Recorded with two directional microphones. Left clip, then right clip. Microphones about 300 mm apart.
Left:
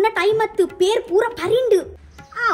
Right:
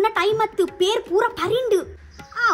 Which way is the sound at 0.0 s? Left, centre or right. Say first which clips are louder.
Left 2 dB; right.